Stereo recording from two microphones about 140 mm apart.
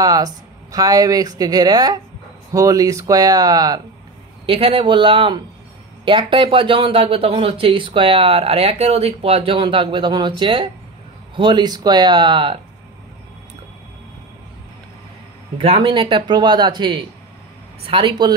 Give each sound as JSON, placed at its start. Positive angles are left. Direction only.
{"t": 0.0, "sound": "speech", "side_deg": -25}
{"t": 4.5, "sound": "speech", "side_deg": -45}
{"t": 15.5, "sound": "speech", "side_deg": -45}